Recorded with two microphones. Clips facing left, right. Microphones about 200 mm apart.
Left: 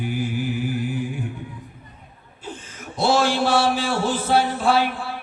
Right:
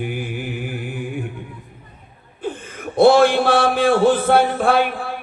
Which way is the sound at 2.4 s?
55° right (ahead or behind).